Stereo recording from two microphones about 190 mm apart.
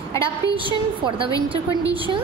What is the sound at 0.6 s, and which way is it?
Speech, 25° right (ahead or behind).